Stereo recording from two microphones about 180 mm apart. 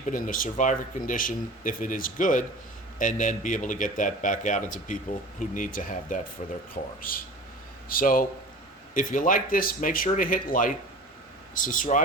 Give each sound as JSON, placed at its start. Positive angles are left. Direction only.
{"t": 0.1, "sound": "speech", "side_deg": 50}
{"t": 7.9, "sound": "speech", "side_deg": 50}